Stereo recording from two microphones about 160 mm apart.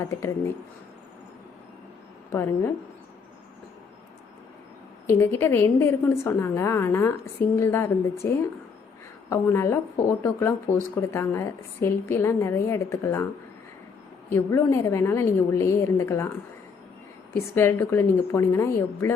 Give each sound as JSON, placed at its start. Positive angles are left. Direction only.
{"t": 0.0, "sound": "speech", "side_deg": 15}
{"t": 2.3, "sound": "speech", "side_deg": 15}
{"t": 5.0, "sound": "speech", "side_deg": 15}
{"t": 14.3, "sound": "speech", "side_deg": 15}
{"t": 17.5, "sound": "speech", "side_deg": 15}